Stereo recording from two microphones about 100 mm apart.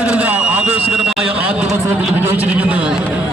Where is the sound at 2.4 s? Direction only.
15° right (ahead or behind).